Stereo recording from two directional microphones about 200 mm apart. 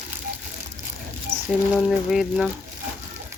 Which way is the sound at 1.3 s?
50° right (ahead or behind).